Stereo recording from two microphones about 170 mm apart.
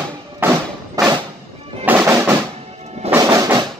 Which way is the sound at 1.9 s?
10° right (ahead or behind).